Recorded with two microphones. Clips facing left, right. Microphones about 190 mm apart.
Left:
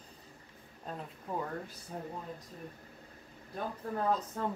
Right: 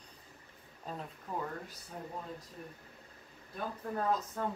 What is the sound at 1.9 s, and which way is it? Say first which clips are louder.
Speech: left 3 dB; 35° left (ahead or behind).